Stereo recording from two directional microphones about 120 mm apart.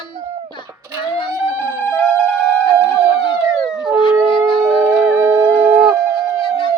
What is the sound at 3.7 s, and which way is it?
Howl, 5° right (ahead or behind).